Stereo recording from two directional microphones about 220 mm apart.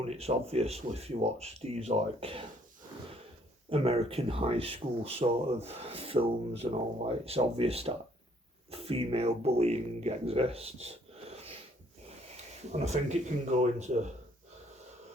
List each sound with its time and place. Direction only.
0.0 s speech: 30° right (ahead or behind)
3.7 s speech: 25° right (ahead or behind)
10.8 s a sound: 30° right (ahead or behind)
12.7 s speech: 30° right (ahead or behind)